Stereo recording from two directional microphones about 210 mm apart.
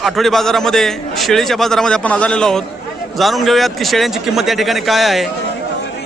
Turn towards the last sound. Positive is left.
turn(degrees=0)  # may be behind; listen again after turning